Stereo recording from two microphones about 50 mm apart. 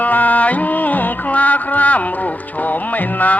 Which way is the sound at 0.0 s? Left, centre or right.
Left.